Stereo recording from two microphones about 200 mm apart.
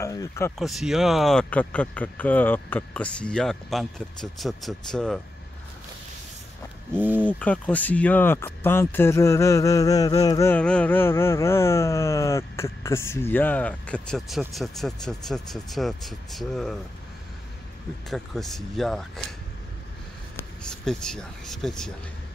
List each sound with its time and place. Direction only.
0.0 s speech: 15° left (ahead or behind)
0.6 s speech: centre (ahead or behind)
7.0 s speech: 10° right (ahead or behind)
7.2 s speech: 5° left (ahead or behind)
18.1 s speech: centre (ahead or behind)
20.6 s speech: 5° left (ahead or behind)